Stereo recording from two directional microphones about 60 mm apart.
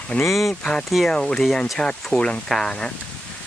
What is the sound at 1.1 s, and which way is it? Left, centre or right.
Speech, centre.